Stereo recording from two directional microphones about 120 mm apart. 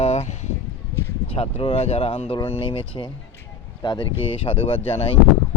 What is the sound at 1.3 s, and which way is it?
Speech, 50° left (ahead or behind).